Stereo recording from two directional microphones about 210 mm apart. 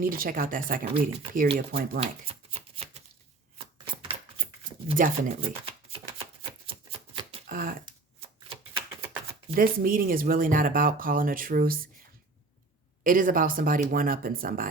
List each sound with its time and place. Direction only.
0.0 s speech: 45° right (ahead or behind)
2.0 s shuffling cards: 30° right (ahead or behind)
3.8 s a sound: 25° right (ahead or behind)
5.0 s speech: 40° right (ahead or behind)
5.4 s shuffling cards: 25° right (ahead or behind)
7.4 s a sound: 40° right (ahead or behind)
9.6 s speech: 40° right (ahead or behind)
13.1 s speech: 40° right (ahead or behind)